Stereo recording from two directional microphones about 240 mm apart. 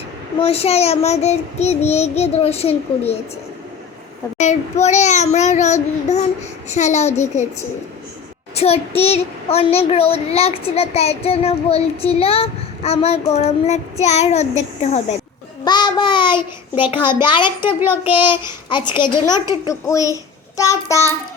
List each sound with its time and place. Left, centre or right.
0.3 s child singing: left
4.4 s child singing: left
8.5 s child singing: left
16.8 s a child's voice: centre
17.2 s child singing: centre